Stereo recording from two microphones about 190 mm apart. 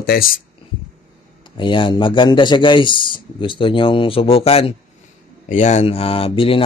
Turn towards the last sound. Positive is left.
turn(degrees=30)  # may be behind; listen again after turning